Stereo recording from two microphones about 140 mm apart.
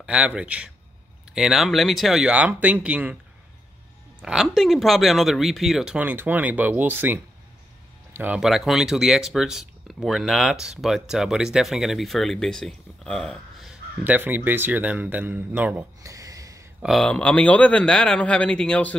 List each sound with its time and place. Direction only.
0.0 s speech: 5° right (ahead or behind)
4.2 s speech: 5° right (ahead or behind)
8.2 s speech: 5° right (ahead or behind)
14.0 s speech: 10° right (ahead or behind)
16.1 s a sound: 25° right (ahead or behind)
16.8 s a man's voice: 5° left (ahead or behind)